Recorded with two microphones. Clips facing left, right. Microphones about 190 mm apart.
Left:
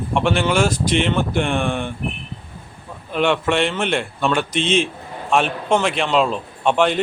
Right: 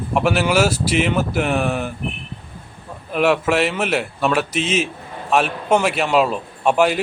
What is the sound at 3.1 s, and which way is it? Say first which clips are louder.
A man's voice: right 1 dB; 5° right (ahead or behind).